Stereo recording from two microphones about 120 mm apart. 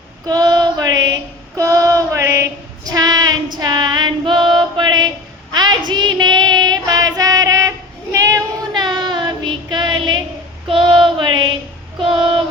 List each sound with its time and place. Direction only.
0.3 s child singing: 35° right (ahead or behind)
5.9 s female singing: 35° right (ahead or behind)
8.1 s child singing: 25° right (ahead or behind); by 12.4 s 45° right (ahead or behind)